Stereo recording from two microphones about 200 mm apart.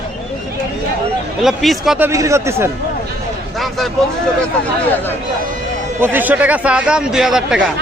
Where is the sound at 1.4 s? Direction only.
Centre (ahead or behind).